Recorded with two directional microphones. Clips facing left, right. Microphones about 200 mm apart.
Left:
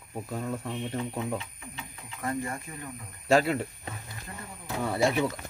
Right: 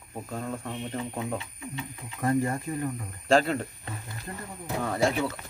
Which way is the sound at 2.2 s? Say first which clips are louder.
Right 7 dB; 40° right (ahead or behind).